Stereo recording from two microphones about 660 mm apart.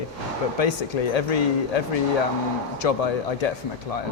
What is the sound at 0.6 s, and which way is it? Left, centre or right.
Speech, left.